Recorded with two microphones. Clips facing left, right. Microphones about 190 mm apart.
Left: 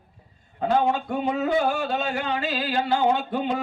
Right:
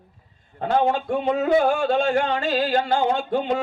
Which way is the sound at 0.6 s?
50° right (ahead or behind).